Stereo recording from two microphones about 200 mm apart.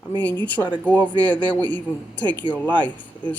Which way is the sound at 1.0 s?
20° right (ahead or behind).